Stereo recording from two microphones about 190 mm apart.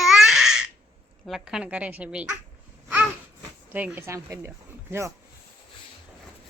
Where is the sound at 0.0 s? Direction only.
Centre (ahead or behind).